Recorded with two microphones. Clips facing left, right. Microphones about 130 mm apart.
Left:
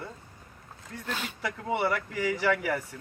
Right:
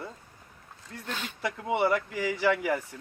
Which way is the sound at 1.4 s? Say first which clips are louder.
Right 2 dB; 25° right (ahead or behind).